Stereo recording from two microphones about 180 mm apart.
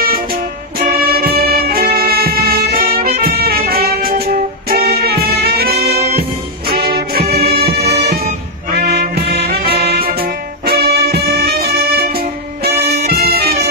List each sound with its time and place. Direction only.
0.7 s music: 55° right (ahead or behind)
13.2 s music: 60° right (ahead or behind)